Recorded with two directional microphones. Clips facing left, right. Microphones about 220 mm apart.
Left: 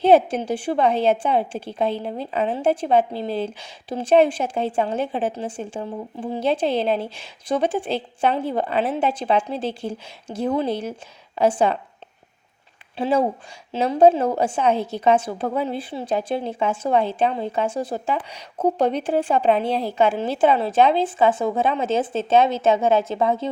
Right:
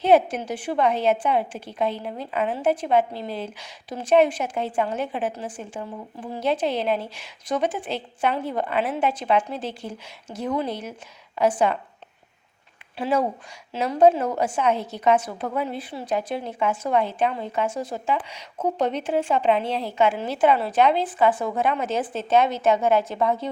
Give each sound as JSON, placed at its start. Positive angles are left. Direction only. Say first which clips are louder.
{"t": 0.0, "sound": "a woman's voice", "louder": "left 3 dB", "side_deg": 30}
{"t": 13.0, "sound": "a woman's voice", "louder": "left 3 dB", "side_deg": 30}